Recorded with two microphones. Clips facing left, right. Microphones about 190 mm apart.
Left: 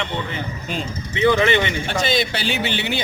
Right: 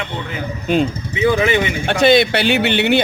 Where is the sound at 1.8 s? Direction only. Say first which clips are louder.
Right 9 dB; 65° right (ahead or behind).